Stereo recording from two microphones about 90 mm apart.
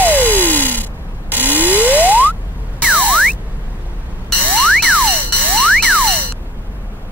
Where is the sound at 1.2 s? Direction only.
20° right (ahead or behind).